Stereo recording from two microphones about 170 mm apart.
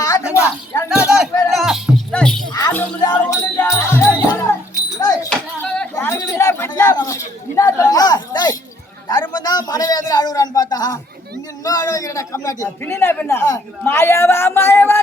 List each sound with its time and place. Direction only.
0.0 s a sound: 20° left (ahead or behind)
1.2 s speech: centre (ahead or behind)
2.5 s music: 20° left (ahead or behind)
3.0 s a man's voice: 20° left (ahead or behind)
4.9 s a sound: 20° left (ahead or behind)
5.3 s a man's voice: 5° left (ahead or behind)